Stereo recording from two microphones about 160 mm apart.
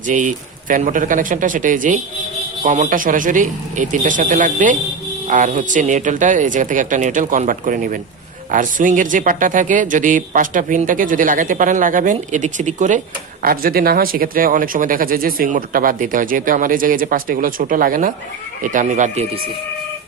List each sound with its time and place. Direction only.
0.1 s speech: 50° right (ahead or behind)
13.4 s speech: 65° right (ahead or behind); by 19.3 s 45° right (ahead or behind)